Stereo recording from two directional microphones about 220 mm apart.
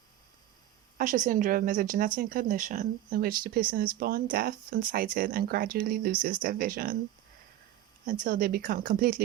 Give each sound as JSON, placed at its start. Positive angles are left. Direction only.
{"t": 0.9, "sound": "speech", "side_deg": -35}
{"t": 8.2, "sound": "speech", "side_deg": -40}